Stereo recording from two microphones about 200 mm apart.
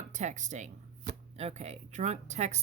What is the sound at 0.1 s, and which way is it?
A woman's voice, 35° right (ahead or behind).